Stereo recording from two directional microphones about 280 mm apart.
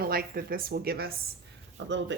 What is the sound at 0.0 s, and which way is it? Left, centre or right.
Speech, right.